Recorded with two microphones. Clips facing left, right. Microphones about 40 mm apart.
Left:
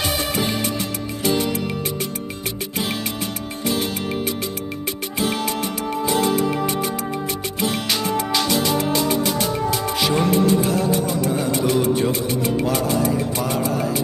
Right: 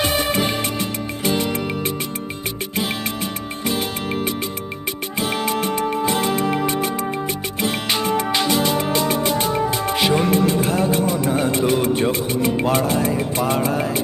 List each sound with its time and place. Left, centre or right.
0.0 s music: right
2.7 s music: centre
5.1 s music: centre
5.5 s music: right
9.0 s music: right
10.1 s music: centre
10.3 s music: right